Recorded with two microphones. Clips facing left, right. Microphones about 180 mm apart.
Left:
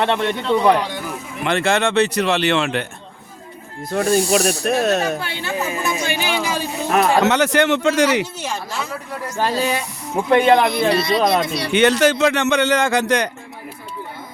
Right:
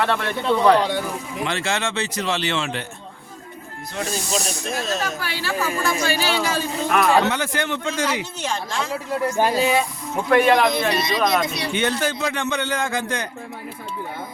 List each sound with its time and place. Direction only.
0.0 s a woman's voice: 25° left (ahead or behind)
1.5 s speech: 60° left (ahead or behind)
3.9 s speech: 60° left (ahead or behind)
5.2 s a woman's voice: 25° left (ahead or behind)
6.8 s speech: 40° left (ahead or behind)
7.2 s a man's voice: 80° left
8.4 s speech: 10° left (ahead or behind)
10.2 s a woman's voice: 20° left (ahead or behind)
10.7 s speech: 20° right (ahead or behind)
11.1 s a woman's voice: 30° left (ahead or behind)
11.7 s speech: 80° left